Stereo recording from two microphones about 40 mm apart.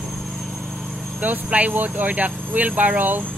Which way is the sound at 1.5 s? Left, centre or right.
Right.